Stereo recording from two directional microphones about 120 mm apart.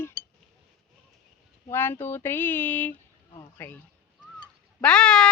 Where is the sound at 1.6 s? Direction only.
20° left (ahead or behind).